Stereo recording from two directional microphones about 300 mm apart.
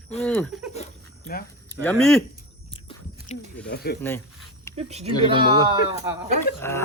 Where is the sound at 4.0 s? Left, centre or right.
Centre.